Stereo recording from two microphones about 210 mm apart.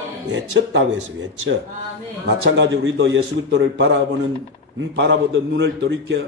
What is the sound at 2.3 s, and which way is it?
A man's voice, 60° right (ahead or behind).